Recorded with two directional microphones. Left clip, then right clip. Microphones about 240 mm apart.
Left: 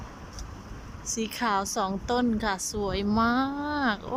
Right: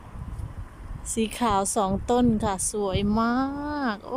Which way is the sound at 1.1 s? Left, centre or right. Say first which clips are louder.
Right 3 dB; centre.